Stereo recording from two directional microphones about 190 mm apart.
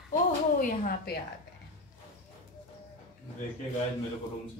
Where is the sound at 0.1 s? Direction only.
45° left (ahead or behind).